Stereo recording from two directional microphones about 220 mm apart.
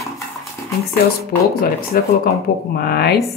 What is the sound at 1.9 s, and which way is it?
A woman's voice, 40° left (ahead or behind).